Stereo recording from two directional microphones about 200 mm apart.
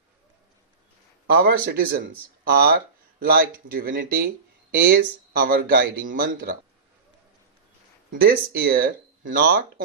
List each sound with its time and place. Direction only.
1.3 s speech: 50° right (ahead or behind)
8.1 s speech: 50° right (ahead or behind)